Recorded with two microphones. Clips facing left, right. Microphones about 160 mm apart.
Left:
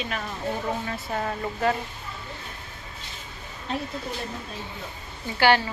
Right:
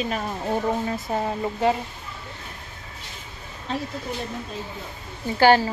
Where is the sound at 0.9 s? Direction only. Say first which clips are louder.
Right 3 dB; 20° right (ahead or behind).